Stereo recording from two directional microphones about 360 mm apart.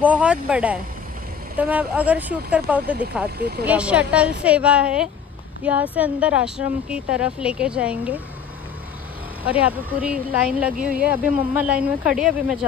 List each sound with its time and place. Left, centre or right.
0.0 s speech: centre
3.3 s speech: right
3.6 s speech: centre
9.4 s speech: centre